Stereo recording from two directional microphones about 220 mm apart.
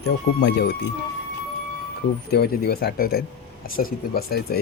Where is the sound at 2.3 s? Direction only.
45° left (ahead or behind).